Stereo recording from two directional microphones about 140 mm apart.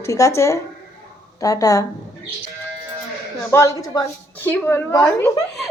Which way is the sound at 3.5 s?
20° left (ahead or behind).